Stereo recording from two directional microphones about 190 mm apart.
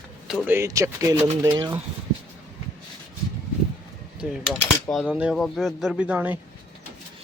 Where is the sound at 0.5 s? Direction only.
15° right (ahead or behind).